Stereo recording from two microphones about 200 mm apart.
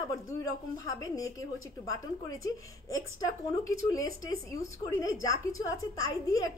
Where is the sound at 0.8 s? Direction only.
15° left (ahead or behind).